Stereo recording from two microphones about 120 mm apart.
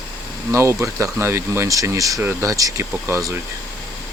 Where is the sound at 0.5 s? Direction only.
25° right (ahead or behind).